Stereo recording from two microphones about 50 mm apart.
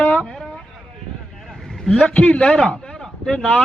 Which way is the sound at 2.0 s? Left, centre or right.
Left.